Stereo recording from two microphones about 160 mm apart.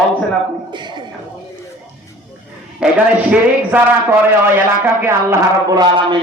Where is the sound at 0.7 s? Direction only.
30° right (ahead or behind).